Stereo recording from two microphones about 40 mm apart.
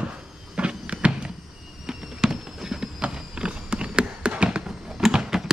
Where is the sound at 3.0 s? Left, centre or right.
Right.